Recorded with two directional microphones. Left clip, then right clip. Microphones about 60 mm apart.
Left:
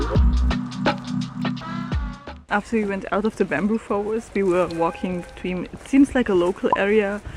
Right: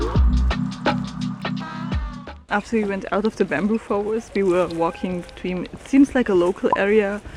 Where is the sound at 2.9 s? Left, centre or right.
Centre.